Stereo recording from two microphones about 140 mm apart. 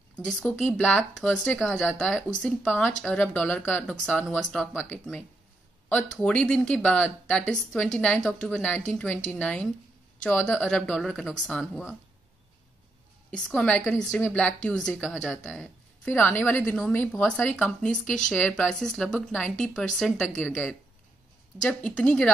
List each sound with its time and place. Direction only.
0.2 s a woman's voice: 5° left (ahead or behind)
13.3 s a woman's voice: 5° left (ahead or behind)
16.1 s a woman's voice: 15° left (ahead or behind)
21.6 s speech: 5° left (ahead or behind)